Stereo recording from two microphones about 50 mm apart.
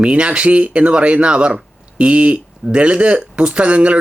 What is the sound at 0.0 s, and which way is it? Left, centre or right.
Speech, right.